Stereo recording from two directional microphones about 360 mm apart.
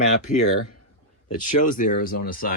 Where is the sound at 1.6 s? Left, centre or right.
Left.